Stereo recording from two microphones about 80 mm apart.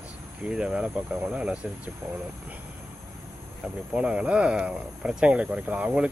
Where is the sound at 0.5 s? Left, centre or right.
Centre.